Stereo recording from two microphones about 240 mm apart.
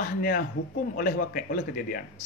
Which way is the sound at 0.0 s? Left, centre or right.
Left.